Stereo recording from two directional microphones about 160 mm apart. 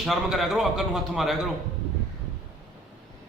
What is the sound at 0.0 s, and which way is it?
A man's voice, centre (ahead or behind).